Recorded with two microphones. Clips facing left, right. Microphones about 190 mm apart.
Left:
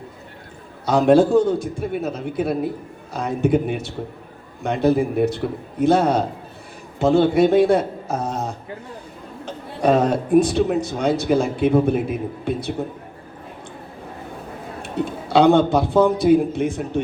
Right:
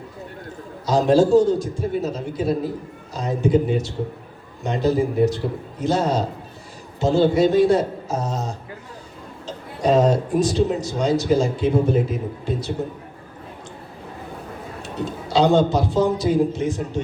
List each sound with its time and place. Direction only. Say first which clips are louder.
0.9 s a man's voice: left 1 dB; 60° left (ahead or behind)
15.0 s a man's voice: left 3 dB; 55° left (ahead or behind)